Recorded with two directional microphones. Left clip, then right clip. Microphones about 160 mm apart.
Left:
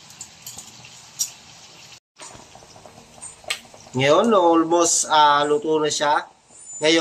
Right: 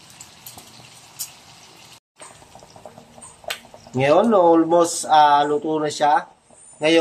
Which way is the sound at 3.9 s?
40° right (ahead or behind).